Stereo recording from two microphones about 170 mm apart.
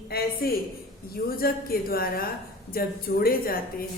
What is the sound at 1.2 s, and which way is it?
A woman's voice, 60° left (ahead or behind).